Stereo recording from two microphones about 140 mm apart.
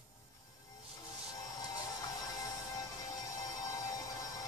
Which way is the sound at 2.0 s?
25° left (ahead or behind).